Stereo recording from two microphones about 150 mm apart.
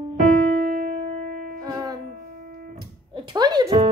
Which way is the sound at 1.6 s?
25° right (ahead or behind).